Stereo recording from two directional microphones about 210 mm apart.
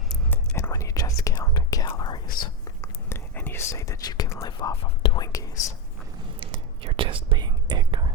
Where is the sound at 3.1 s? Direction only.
10° left (ahead or behind).